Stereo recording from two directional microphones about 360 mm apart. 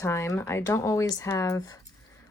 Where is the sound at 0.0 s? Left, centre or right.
Centre.